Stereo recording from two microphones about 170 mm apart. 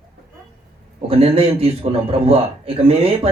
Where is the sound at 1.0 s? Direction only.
35° right (ahead or behind).